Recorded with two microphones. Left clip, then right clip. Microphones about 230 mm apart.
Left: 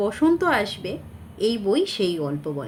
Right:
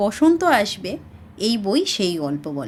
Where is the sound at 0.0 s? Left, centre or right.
Right.